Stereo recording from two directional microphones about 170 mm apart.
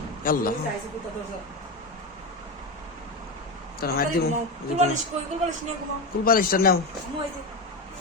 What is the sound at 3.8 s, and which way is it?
Speech, 65° left (ahead or behind).